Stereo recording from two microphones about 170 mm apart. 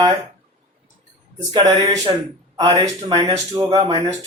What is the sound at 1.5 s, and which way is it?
Speech, 25° right (ahead or behind).